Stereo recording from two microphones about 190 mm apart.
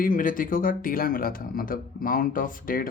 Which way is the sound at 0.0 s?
45° left (ahead or behind).